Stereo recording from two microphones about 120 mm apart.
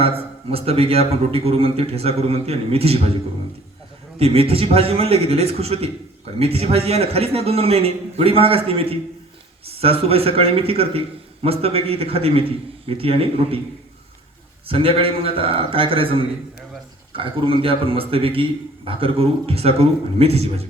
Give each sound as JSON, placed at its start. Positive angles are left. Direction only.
{"t": 0.0, "sound": "a man's voice", "side_deg": -55}
{"t": 4.2, "sound": "a man's voice", "side_deg": -55}
{"t": 14.7, "sound": "a man's voice", "side_deg": -50}